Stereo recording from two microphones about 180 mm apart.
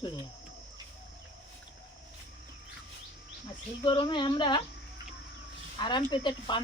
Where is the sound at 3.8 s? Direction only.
25° left (ahead or behind).